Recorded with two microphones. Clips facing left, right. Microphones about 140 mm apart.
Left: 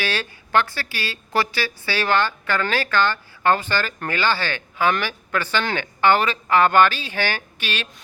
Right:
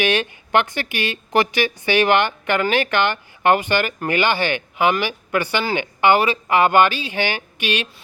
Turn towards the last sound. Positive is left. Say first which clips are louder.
# right 6 dB
turn(degrees=-15)  # may be behind; listen again after turning